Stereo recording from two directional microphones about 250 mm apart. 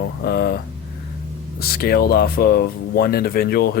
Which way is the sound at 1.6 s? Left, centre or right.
Left.